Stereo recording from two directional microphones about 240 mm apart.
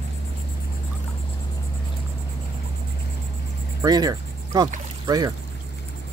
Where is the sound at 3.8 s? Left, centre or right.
Centre.